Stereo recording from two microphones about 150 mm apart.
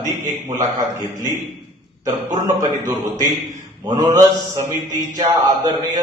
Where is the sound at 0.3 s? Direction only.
55° right (ahead or behind).